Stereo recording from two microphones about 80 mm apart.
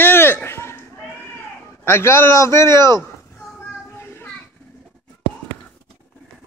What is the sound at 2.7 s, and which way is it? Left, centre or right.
Speech, right.